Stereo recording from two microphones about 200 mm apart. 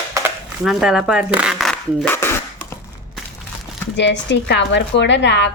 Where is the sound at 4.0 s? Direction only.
60° left (ahead or behind).